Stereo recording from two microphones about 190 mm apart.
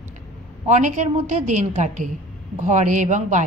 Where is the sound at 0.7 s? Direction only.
40° right (ahead or behind).